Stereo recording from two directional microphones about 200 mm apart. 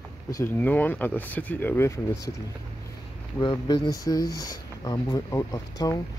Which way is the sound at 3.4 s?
20° left (ahead or behind).